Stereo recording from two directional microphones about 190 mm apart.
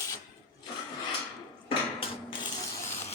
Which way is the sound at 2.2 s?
25° left (ahead or behind).